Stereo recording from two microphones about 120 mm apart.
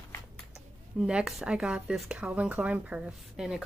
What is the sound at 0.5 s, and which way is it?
Speech, 5° right (ahead or behind).